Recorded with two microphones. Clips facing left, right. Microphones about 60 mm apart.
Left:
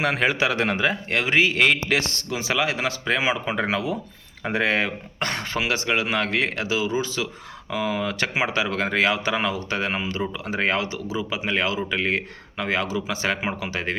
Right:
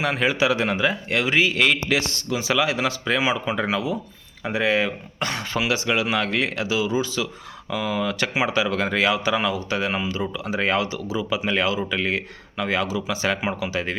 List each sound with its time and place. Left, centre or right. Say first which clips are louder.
0.0 s speech: even; left